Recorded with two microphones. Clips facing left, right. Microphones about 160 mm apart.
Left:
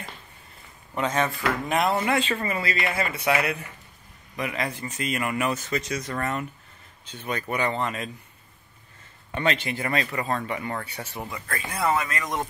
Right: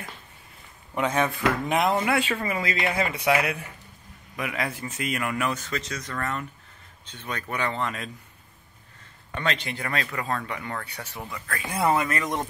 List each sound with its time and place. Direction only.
0.9 s speech: 10° right (ahead or behind); by 8.1 s 5° left (ahead or behind)
9.3 s speech: 10° left (ahead or behind)
11.7 s speech: 25° right (ahead or behind)